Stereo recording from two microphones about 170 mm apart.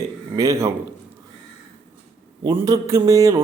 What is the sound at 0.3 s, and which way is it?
Speech, 20° right (ahead or behind).